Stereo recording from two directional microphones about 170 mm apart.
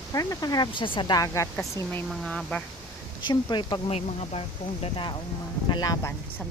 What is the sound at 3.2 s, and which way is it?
Speech, 25° left (ahead or behind).